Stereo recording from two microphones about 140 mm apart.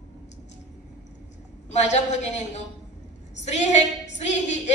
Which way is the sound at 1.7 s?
55° left (ahead or behind).